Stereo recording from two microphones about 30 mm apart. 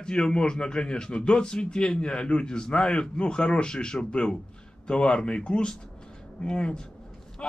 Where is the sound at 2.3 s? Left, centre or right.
Left.